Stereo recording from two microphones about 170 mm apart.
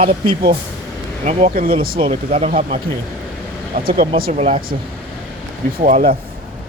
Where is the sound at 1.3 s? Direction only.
45° right (ahead or behind); by 2.0 s 60° right (ahead or behind).